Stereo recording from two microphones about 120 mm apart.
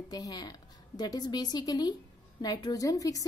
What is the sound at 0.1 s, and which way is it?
A woman's voice, 35° left (ahead or behind).